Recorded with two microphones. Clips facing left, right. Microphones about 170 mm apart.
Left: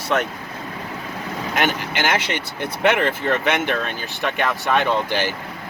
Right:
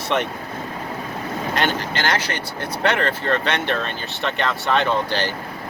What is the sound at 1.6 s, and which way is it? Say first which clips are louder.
Speech: left 2 dB; 10° left (ahead or behind).